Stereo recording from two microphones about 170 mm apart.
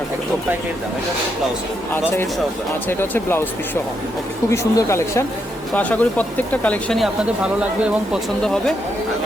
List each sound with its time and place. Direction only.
3.0 s speech: 15° left (ahead or behind)
4.5 s speech: 15° left (ahead or behind)